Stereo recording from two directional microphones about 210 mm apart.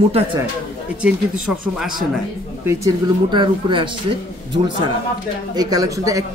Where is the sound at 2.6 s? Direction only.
20° right (ahead or behind).